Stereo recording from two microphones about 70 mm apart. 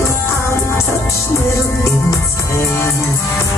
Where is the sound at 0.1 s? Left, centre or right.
Left.